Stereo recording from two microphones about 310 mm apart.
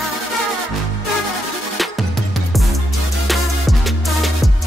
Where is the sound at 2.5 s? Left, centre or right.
Centre.